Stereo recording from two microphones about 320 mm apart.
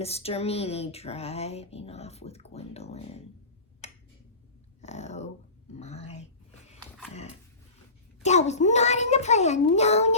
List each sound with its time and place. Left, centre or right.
0.0 s speech: centre
3.8 s tick-tock: left
4.8 s speech: left
7.1 s dog: centre
8.2 s speech: left